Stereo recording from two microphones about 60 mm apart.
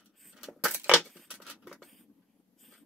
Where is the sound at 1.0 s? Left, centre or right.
Centre.